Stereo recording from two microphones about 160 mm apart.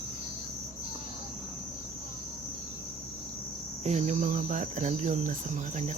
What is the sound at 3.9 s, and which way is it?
Cricket, 45° right (ahead or behind).